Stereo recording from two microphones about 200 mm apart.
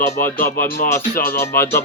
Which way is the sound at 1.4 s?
10° left (ahead or behind).